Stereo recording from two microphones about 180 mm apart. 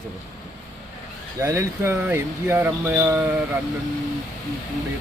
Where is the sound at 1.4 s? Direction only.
15° right (ahead or behind).